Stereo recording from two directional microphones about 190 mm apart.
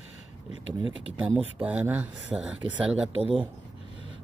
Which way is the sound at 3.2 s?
30° right (ahead or behind).